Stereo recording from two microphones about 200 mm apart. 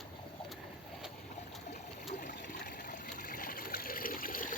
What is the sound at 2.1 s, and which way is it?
Water, 40° left (ahead or behind).